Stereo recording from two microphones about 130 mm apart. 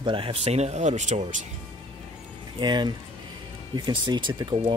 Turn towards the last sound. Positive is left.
turn(degrees=-35)  # may be behind; listen again after turning